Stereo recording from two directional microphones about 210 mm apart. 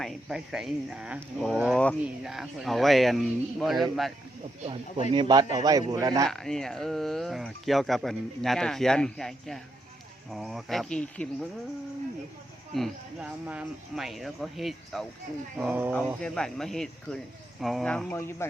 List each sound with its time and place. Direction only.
0.0 s speech: centre (ahead or behind)
4.6 s a man's voice: 25° right (ahead or behind)
6.2 s speech: centre (ahead or behind)
12.7 s speech: centre (ahead or behind)